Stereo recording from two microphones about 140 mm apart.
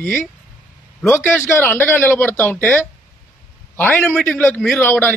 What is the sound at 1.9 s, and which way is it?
Speech, 15° left (ahead or behind).